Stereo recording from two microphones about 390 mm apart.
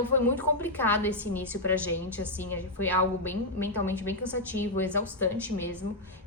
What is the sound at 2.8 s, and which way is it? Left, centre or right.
A woman's voice, centre.